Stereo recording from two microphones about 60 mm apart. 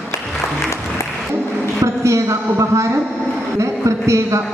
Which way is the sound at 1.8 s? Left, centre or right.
Right.